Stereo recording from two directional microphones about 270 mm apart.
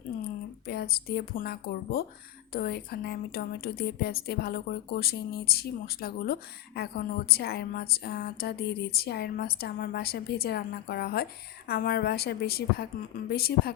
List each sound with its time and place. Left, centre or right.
0.6 s a woman's voice: left